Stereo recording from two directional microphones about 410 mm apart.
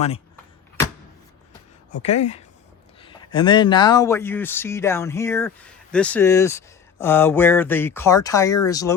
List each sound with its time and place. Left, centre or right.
2.0 s speech: centre